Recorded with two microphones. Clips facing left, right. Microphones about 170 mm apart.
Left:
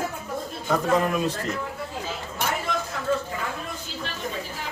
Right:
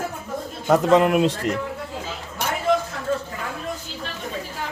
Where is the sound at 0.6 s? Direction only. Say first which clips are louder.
Right 6 dB; 75° right (ahead or behind).